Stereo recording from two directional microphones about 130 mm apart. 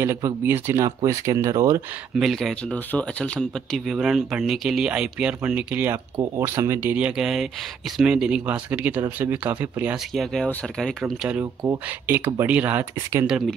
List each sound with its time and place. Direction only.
0.0 s speech: 20° right (ahead or behind)
2.1 s speech: centre (ahead or behind)
2.7 s speech: 10° left (ahead or behind)
3.3 s speech: centre (ahead or behind)
10.1 s speech: 5° left (ahead or behind)
11.6 s speech: 20° right (ahead or behind)